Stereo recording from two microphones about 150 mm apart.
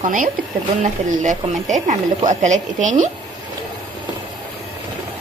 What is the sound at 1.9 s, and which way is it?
Speech, 55° right (ahead or behind).